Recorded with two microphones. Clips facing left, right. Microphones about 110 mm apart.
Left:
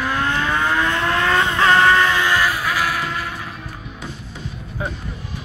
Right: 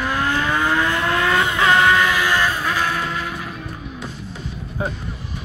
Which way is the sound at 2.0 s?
25° left (ahead or behind).